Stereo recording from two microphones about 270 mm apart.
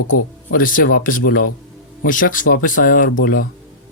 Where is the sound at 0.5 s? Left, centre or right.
Left.